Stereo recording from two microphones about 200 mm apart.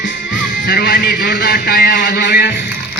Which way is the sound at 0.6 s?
50° left (ahead or behind).